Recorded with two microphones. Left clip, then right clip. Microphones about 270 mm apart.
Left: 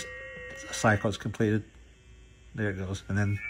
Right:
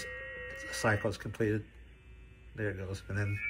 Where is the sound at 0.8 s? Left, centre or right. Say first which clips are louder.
Left 6 dB; centre.